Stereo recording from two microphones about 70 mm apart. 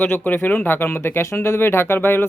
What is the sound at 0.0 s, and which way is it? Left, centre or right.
Speech, left.